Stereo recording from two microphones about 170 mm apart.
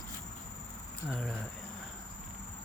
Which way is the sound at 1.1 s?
Centre (ahead or behind).